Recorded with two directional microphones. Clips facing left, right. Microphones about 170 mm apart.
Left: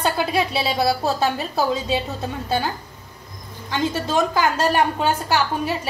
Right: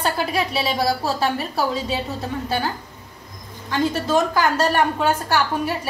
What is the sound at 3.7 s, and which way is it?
A woman's voice, 20° left (ahead or behind).